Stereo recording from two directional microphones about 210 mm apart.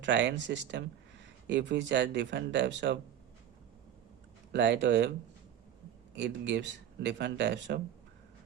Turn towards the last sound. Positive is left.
turn(degrees=-55)  # may be behind; listen again after turning